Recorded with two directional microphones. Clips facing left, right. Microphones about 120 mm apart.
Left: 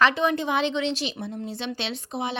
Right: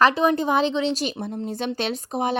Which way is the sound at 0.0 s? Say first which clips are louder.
Right 3 dB; 35° right (ahead or behind).